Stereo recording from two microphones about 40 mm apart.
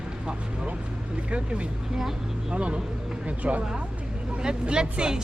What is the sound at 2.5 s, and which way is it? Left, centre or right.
Speech, right.